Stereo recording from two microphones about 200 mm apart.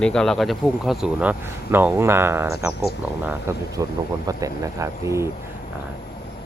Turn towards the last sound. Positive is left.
turn(degrees=-15)  # may be behind; listen again after turning